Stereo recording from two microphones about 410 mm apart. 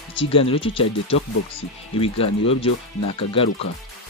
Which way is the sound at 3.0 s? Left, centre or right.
Left.